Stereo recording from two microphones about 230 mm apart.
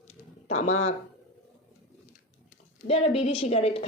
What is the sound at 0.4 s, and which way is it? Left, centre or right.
Speech, left.